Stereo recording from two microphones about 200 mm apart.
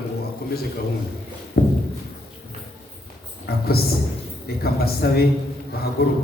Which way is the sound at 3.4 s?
50° left (ahead or behind).